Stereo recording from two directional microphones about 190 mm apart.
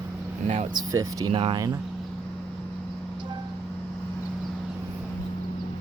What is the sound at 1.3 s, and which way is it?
Speech, 30° right (ahead or behind).